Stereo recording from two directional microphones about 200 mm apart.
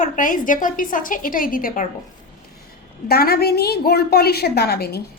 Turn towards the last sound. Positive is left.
turn(degrees=50)  # may be behind; listen again after turning